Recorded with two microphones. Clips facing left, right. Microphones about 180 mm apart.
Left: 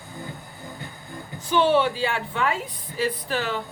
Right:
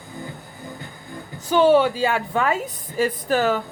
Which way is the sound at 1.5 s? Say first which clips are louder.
Right 4 dB; 40° right (ahead or behind).